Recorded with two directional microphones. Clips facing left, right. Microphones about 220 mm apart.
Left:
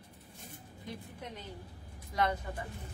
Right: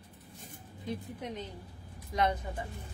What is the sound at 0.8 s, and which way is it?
A woman's voice, 20° right (ahead or behind).